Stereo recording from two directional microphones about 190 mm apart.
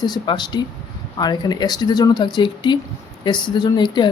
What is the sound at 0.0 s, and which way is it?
Speech, 20° left (ahead or behind).